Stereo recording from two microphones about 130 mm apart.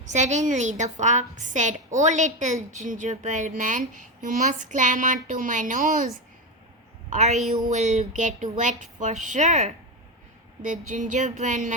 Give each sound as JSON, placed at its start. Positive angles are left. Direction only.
{"t": 0.0, "sound": "speech", "side_deg": -65}
{"t": 2.7, "sound": "speech", "side_deg": -75}
{"t": 7.1, "sound": "a woman's voice", "side_deg": -60}
{"t": 7.6, "sound": "speech", "side_deg": -70}
{"t": 10.6, "sound": "speech", "side_deg": -80}